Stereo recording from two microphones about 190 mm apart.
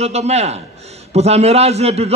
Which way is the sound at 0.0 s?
35° right (ahead or behind).